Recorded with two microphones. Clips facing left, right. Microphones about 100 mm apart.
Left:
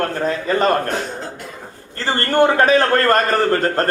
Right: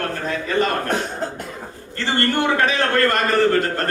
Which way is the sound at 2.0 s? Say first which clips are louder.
Left 5 dB; 40° left (ahead or behind).